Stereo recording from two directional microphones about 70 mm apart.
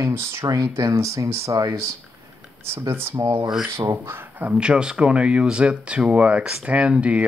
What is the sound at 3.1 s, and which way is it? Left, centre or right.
Speech, right.